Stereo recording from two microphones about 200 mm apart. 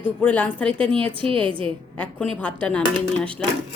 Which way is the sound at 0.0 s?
5° left (ahead or behind).